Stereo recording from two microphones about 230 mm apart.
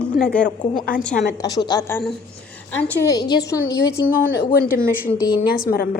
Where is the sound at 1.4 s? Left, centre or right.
Centre.